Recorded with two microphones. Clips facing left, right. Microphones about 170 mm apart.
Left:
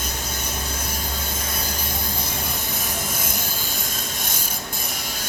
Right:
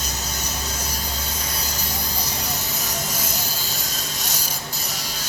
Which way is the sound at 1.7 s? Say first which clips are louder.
Left 1 dB; 50° left (ahead or behind).